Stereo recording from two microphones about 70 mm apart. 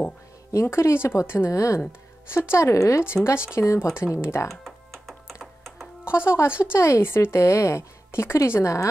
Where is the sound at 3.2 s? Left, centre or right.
Left.